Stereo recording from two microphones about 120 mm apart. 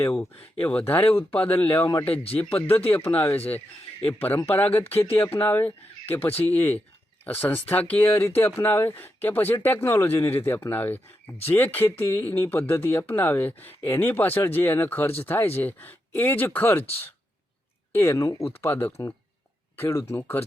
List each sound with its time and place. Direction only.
0.6 s speech: 15° left (ahead or behind)
17.9 s speech: 20° left (ahead or behind)